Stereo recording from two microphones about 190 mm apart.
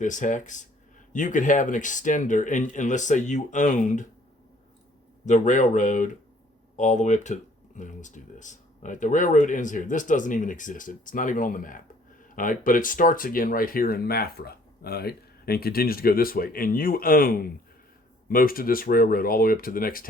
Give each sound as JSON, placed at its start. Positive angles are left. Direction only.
{"t": 0.0, "sound": "speech", "side_deg": 40}
{"t": 5.2, "sound": "speech", "side_deg": 40}